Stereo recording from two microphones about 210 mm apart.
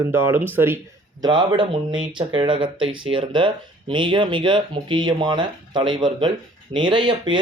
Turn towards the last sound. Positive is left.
turn(degrees=-20)  # may be behind; listen again after turning